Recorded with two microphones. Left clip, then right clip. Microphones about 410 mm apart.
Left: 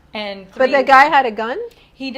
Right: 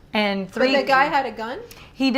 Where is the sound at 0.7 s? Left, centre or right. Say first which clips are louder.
Left 9 dB; left.